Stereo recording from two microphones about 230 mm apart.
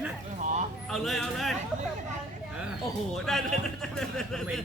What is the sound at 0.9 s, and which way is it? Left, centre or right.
Speech, centre.